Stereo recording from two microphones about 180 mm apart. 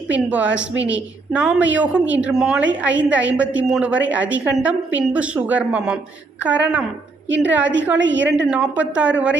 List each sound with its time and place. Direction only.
0.1 s a woman's voice: 5° right (ahead or behind)
7.6 s a woman's voice: 90° right
8.4 s a woman's voice: 5° right (ahead or behind)